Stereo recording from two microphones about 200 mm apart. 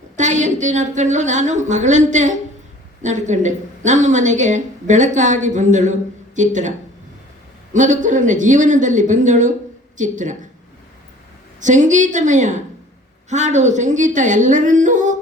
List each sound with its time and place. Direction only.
0.2 s a woman's voice: 35° right (ahead or behind)
11.6 s a woman's voice: 40° right (ahead or behind)